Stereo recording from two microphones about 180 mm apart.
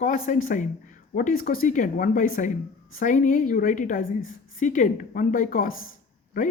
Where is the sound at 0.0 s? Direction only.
45° left (ahead or behind).